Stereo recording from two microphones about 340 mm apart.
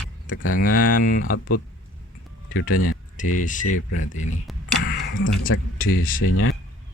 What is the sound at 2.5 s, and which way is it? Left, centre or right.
Speech, left.